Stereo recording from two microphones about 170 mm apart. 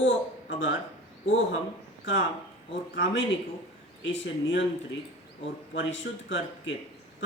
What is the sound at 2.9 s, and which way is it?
A man's voice, 90° left.